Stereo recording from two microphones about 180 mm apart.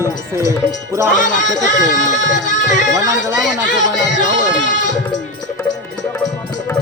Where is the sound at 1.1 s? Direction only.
45° left (ahead or behind).